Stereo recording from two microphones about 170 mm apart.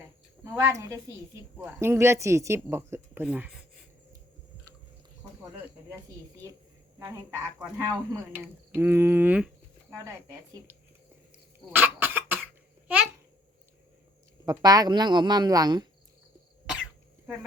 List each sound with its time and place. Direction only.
0.4 s speech: 20° right (ahead or behind)
6.3 s speech: 20° right (ahead or behind)
7.8 s speech: 20° right (ahead or behind)
11.7 s cough: 10° right (ahead or behind)
12.9 s babbling: 10° right (ahead or behind)
14.4 s speech: 20° right (ahead or behind)